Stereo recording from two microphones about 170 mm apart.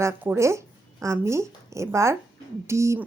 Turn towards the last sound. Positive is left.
turn(degrees=-15)  # may be behind; listen again after turning